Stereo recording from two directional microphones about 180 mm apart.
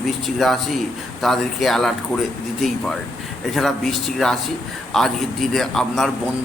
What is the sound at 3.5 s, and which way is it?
Speech, centre (ahead or behind).